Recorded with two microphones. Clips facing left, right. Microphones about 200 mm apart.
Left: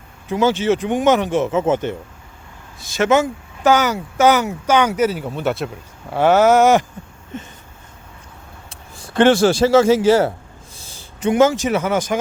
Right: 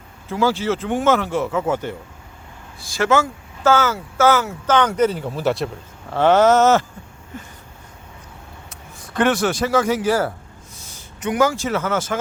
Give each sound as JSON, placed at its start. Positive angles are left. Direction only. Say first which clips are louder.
{"t": 0.3, "sound": "speech", "louder": "left 3 dB", "side_deg": 20}
{"t": 8.7, "sound": "a man's voice", "louder": "left 5 dB", "side_deg": 30}